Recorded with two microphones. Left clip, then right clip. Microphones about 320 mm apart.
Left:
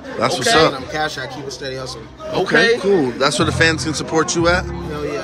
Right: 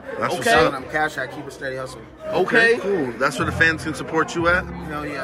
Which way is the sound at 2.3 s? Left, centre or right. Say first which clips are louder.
Left 2 dB; right.